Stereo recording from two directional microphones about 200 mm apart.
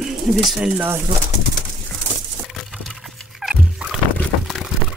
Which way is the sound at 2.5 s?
Centre (ahead or behind).